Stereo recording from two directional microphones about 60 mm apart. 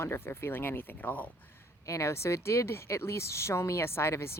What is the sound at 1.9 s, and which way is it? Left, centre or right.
Speech, left.